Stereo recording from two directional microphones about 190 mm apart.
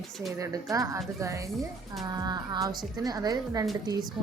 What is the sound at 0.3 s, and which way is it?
A woman's voice, 15° right (ahead or behind).